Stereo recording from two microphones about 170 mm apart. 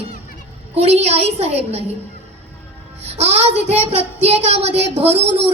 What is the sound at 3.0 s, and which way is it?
A child's voice, 40° right (ahead or behind).